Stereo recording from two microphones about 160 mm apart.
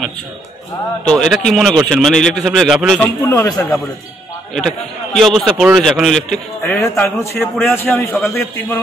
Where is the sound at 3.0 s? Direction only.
15° left (ahead or behind).